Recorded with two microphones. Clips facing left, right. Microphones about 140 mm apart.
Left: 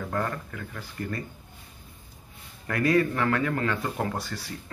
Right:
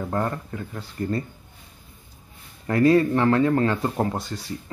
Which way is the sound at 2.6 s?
30° right (ahead or behind).